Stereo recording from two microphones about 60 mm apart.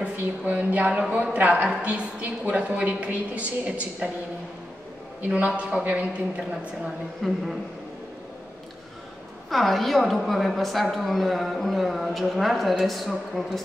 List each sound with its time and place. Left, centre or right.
0.0 s a woman's voice: right
5.3 s a woman's voice: right
7.2 s a woman's voice: centre
9.5 s a woman's voice: centre